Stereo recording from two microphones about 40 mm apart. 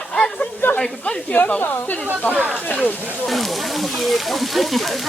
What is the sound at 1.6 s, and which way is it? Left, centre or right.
Speech, left.